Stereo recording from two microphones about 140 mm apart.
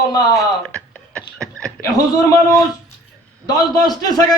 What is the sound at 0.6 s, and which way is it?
Beatboxing, 5° left (ahead or behind).